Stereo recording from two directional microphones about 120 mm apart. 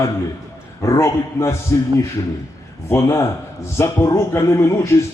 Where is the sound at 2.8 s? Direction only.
20° left (ahead or behind).